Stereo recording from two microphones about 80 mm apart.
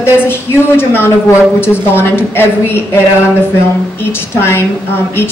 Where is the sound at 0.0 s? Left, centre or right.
Left.